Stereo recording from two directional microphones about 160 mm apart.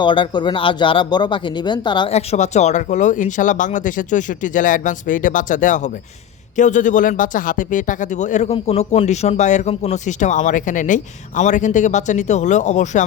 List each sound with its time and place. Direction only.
0.0 s speech: 30° left (ahead or behind)
2.1 s speech: 45° left (ahead or behind)